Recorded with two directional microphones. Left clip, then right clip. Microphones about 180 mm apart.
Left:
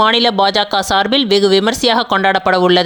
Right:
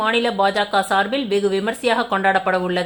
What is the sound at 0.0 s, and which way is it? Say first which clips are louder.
Speech: left 6 dB; 45° left (ahead or behind).